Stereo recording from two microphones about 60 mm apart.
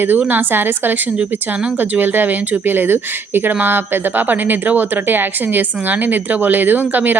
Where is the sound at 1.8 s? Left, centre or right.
Right.